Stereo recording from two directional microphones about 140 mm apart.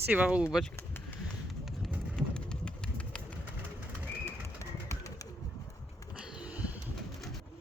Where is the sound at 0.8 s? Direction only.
15° left (ahead or behind).